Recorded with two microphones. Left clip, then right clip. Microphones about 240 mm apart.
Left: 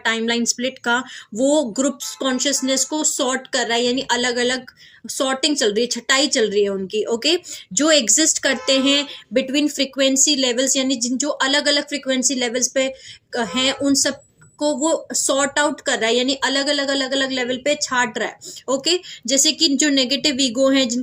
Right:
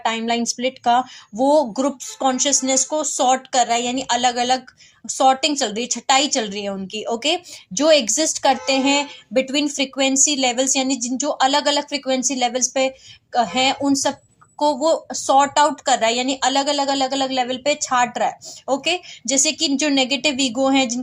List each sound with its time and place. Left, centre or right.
0.0 s speech: right